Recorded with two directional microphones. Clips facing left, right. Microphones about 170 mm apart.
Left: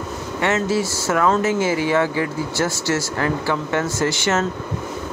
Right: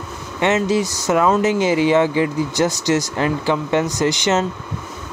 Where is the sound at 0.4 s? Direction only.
20° right (ahead or behind).